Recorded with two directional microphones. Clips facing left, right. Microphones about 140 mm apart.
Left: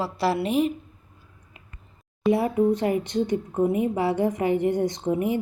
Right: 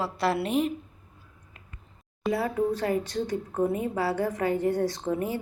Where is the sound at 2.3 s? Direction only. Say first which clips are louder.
Left 5 dB; 20° left (ahead or behind).